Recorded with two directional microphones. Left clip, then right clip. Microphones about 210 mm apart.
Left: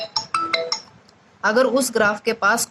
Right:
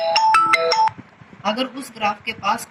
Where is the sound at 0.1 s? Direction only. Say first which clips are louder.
Right 9 dB; 40° right (ahead or behind).